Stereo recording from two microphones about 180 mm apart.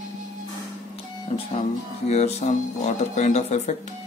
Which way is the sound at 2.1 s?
35° left (ahead or behind).